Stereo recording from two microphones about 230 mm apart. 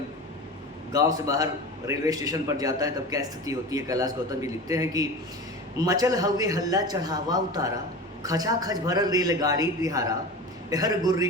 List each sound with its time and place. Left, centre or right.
0.9 s a man's voice: centre